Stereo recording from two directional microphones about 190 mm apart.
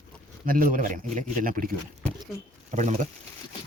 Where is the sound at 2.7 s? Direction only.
40° right (ahead or behind).